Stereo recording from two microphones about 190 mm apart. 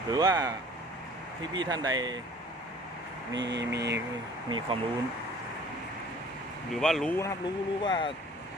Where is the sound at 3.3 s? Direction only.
70° right (ahead or behind).